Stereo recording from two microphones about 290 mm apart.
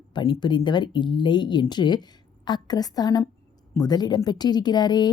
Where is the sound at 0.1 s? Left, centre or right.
Centre.